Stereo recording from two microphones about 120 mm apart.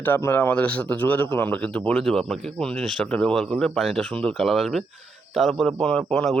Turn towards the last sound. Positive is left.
turn(degrees=5)  # may be behind; listen again after turning